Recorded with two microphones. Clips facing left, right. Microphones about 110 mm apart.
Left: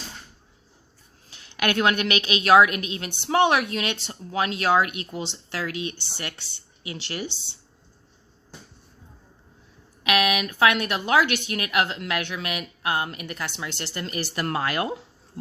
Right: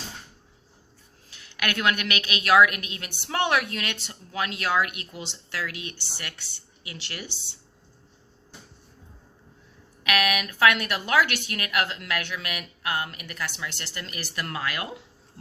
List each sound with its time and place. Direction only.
1.3 s a woman's voice: 30° left (ahead or behind)
10.0 s a woman's voice: 25° left (ahead or behind)